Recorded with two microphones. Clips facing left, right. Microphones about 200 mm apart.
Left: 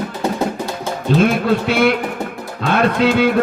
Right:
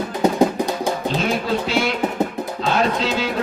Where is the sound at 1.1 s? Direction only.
55° left (ahead or behind).